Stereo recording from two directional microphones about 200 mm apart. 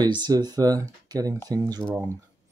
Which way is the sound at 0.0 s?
20° right (ahead or behind).